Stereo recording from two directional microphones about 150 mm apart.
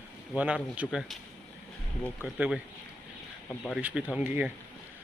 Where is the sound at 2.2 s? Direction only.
5° right (ahead or behind).